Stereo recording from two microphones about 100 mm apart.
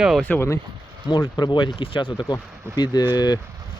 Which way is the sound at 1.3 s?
50° left (ahead or behind).